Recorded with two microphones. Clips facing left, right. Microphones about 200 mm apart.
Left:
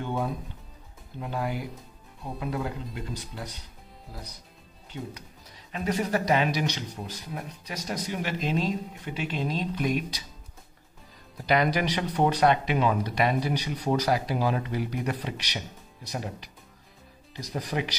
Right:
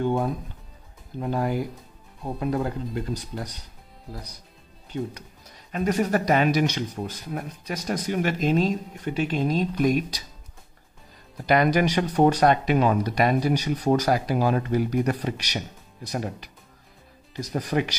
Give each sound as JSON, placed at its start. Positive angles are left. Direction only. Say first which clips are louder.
{"t": 0.0, "sound": "speech", "louder": "right 6 dB", "side_deg": -45}
{"t": 5.7, "sound": "speech", "louder": "right 4 dB", "side_deg": -45}
{"t": 11.4, "sound": "speech", "louder": "right 4 dB", "side_deg": -50}